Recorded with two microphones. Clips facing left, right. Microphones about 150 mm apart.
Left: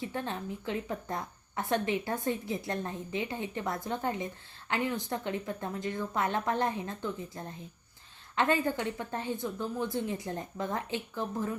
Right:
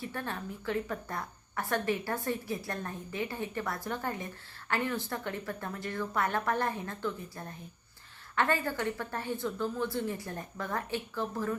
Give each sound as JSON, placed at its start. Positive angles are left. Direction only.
{"t": 0.0, "sound": "a woman's voice", "side_deg": 20}